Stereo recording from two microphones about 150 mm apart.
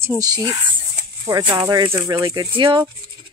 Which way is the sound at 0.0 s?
20° right (ahead or behind).